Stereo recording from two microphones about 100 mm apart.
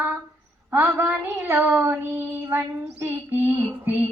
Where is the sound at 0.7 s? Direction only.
20° right (ahead or behind).